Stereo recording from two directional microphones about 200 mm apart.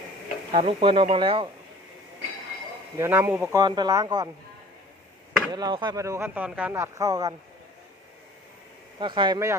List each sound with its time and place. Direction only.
0.5 s speech: 25° right (ahead or behind)
3.0 s speech: 10° right (ahead or behind)
5.5 s speech: 20° right (ahead or behind)
9.0 s speech: 25° right (ahead or behind)